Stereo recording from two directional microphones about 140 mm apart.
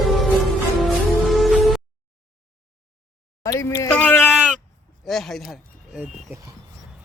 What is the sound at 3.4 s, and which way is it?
Speech, 25° left (ahead or behind).